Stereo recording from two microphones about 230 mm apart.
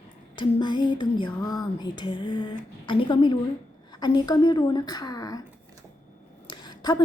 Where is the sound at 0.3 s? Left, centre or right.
Centre.